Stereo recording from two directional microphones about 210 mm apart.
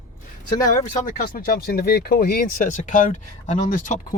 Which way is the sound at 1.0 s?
45° left (ahead or behind).